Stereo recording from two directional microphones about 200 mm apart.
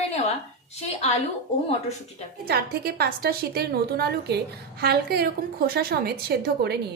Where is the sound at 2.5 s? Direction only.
50° right (ahead or behind).